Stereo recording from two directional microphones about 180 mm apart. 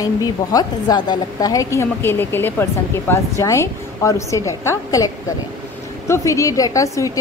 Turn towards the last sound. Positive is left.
turn(degrees=20)  # may be behind; listen again after turning